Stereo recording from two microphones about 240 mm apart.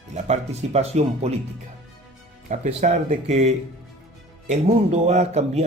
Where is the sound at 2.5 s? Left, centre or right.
Right.